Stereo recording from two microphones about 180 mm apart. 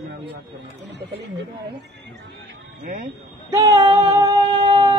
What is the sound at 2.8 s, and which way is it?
Speech, 45° right (ahead or behind).